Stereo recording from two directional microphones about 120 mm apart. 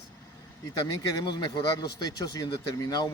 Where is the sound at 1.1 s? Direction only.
35° left (ahead or behind).